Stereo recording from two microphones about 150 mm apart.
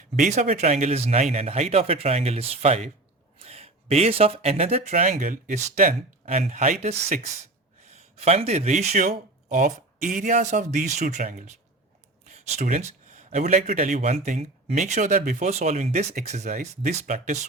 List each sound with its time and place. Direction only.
0.2 s speech: 55° right (ahead or behind)